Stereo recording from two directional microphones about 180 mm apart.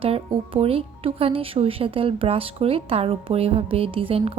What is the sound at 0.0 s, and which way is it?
Speech, 30° right (ahead or behind).